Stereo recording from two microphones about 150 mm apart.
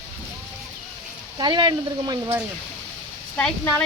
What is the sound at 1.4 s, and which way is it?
Speech, 30° right (ahead or behind).